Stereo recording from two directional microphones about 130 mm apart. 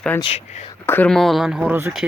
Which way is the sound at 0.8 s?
15° left (ahead or behind).